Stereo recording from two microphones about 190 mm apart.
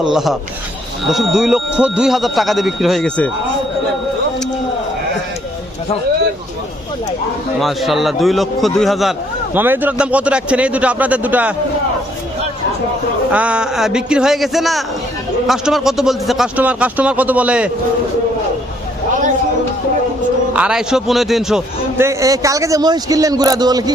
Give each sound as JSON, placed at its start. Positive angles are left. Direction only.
{"t": 0.0, "sound": "speech", "side_deg": 0}
{"t": 7.6, "sound": "speech", "side_deg": 0}
{"t": 13.3, "sound": "speech", "side_deg": -5}
{"t": 20.5, "sound": "speech", "side_deg": -5}
{"t": 21.9, "sound": "a man's voice", "side_deg": -15}